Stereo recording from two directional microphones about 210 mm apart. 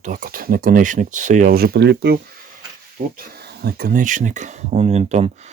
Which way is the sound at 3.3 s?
50° right (ahead or behind).